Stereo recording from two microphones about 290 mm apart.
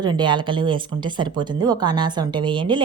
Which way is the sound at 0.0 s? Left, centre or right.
Centre.